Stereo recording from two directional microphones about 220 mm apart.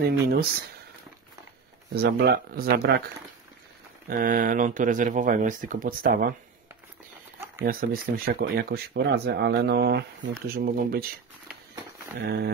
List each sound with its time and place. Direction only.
0.0 s speech: 45° right (ahead or behind)
2.0 s speech: 45° right (ahead or behind)
4.1 s speech: 40° right (ahead or behind)
7.6 s speech: 40° right (ahead or behind)
12.2 s speech: 50° right (ahead or behind)